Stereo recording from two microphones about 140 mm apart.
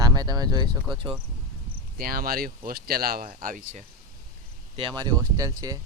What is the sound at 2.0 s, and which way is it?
Speech, 90° right.